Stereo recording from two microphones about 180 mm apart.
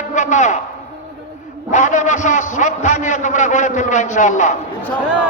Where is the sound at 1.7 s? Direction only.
45° left (ahead or behind).